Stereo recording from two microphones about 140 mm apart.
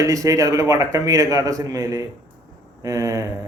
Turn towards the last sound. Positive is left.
turn(degrees=-20)  # may be behind; listen again after turning